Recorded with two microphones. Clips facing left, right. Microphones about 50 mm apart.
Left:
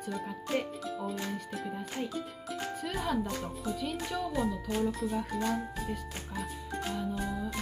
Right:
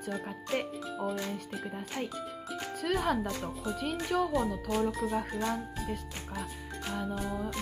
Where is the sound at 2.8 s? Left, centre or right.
Right.